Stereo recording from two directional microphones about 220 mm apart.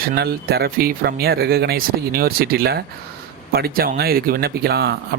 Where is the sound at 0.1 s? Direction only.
45° right (ahead or behind).